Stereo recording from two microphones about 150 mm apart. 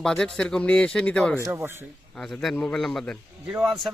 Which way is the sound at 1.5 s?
15° right (ahead or behind).